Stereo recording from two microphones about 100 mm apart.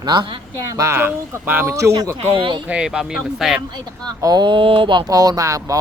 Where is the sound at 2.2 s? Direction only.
55° right (ahead or behind).